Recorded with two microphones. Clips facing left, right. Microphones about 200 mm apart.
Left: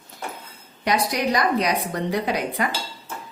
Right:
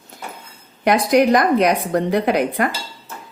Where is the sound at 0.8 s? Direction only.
50° right (ahead or behind).